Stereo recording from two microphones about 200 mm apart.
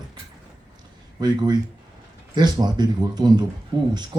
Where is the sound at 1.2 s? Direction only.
20° right (ahead or behind).